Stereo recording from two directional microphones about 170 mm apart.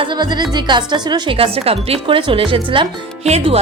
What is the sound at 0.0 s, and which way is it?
A woman's voice, 25° right (ahead or behind).